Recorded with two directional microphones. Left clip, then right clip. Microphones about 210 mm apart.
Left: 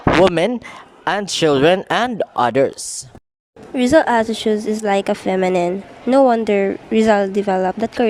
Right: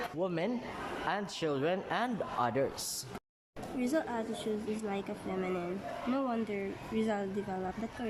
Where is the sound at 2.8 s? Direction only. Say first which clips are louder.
Left 9 dB; 35° left (ahead or behind).